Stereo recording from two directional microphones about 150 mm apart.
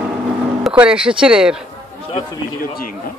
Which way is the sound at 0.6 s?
10° right (ahead or behind).